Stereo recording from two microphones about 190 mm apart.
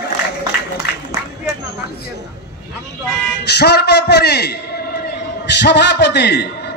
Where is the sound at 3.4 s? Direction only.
60° left (ahead or behind).